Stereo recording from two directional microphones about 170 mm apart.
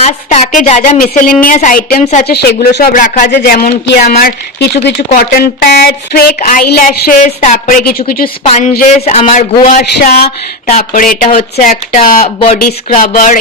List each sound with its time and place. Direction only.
0.0 s a woman's voice: 40° left (ahead or behind)
2.2 s speech: 70° left (ahead or behind); by 3.3 s 50° left (ahead or behind)
3.3 s speech: 65° left (ahead or behind)
8.4 s a woman's voice: 45° left (ahead or behind)
9.6 s speech: 55° left (ahead or behind)
10.7 s a man's voice: 40° left (ahead or behind)
11.0 s a woman's voice: 55° left (ahead or behind)
11.9 s a man's voice: 35° left (ahead or behind)
13.0 s a woman's voice: 50° left (ahead or behind)